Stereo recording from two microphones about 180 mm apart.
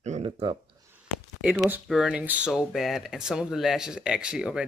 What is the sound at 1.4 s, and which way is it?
Speech, 5° right (ahead or behind).